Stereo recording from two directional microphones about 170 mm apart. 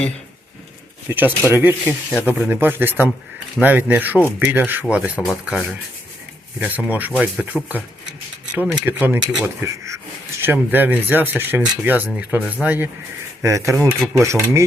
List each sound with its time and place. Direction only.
1.0 s speech: 10° right (ahead or behind)
6.6 s speech: 10° right (ahead or behind)